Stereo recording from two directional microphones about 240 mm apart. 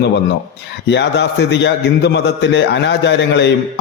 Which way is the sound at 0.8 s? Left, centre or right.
Left.